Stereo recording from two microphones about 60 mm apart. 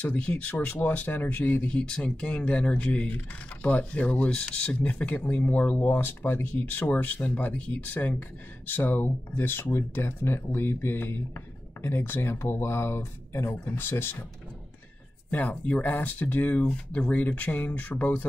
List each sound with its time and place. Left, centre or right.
0.0 s speech: left
1.7 s speech: centre; by 14.1 s left
15.3 s speech: left